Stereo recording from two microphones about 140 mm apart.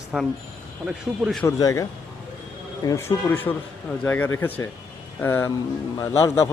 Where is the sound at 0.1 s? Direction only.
10° right (ahead or behind).